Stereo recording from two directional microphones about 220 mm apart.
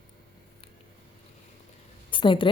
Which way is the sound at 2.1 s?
20° left (ahead or behind).